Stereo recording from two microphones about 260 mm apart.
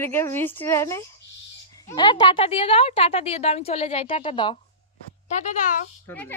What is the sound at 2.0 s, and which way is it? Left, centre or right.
A woman's voice, centre.